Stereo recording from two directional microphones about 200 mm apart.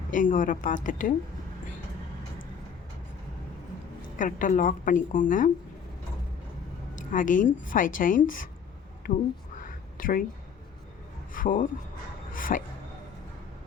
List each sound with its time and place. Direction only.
0.1 s a woman's voice: 40° left (ahead or behind)
4.2 s a woman's voice: 40° left (ahead or behind)
6.9 s a woman's voice: 40° left (ahead or behind)
9.6 s whispering: 45° left (ahead or behind)
11.3 s speech: 45° left (ahead or behind)
12.3 s a sound: 45° left (ahead or behind)